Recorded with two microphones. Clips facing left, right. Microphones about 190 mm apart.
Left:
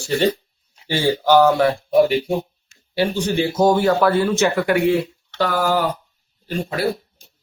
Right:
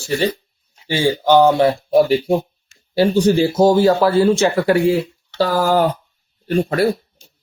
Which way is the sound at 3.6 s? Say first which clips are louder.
Right 2 dB; 25° right (ahead or behind).